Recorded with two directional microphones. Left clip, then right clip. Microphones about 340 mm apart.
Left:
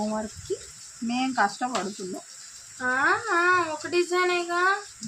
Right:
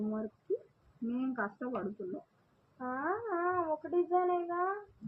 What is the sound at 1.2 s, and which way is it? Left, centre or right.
Speech, left.